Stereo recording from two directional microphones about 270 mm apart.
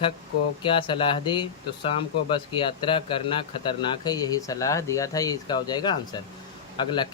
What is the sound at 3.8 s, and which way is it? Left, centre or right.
Speech, centre.